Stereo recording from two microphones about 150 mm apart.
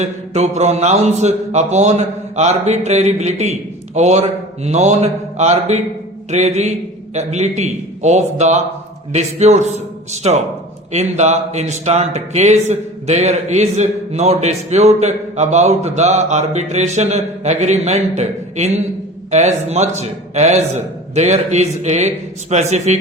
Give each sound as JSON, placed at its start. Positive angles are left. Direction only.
{"t": 0.0, "sound": "speech", "side_deg": -50}